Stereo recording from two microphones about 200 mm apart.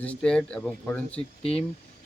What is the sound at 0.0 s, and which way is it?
Speech, 5° left (ahead or behind).